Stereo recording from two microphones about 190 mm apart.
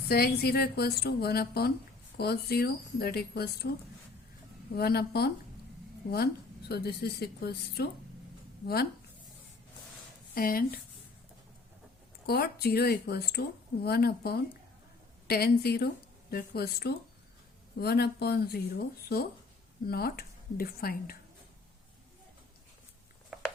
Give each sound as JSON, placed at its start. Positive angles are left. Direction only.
{"t": 0.1, "sound": "a woman's voice", "side_deg": 55}
{"t": 4.7, "sound": "a woman's voice", "side_deg": 55}
{"t": 6.7, "sound": "a woman's voice", "side_deg": 55}
{"t": 10.3, "sound": "a woman's voice", "side_deg": 50}
{"t": 12.2, "sound": "a woman's voice", "side_deg": 55}